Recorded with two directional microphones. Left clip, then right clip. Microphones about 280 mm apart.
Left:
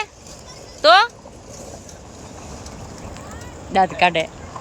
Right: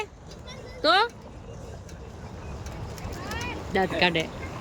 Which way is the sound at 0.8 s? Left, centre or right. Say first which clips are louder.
Left 9 dB; centre.